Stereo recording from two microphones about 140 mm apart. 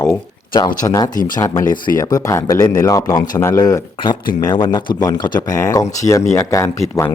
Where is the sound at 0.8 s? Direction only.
25° left (ahead or behind).